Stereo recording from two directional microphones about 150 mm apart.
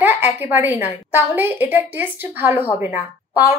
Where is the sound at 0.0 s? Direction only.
10° right (ahead or behind).